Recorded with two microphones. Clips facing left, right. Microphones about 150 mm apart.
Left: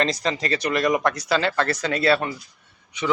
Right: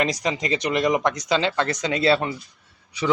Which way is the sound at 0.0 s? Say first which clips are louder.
Even; 15° right (ahead or behind).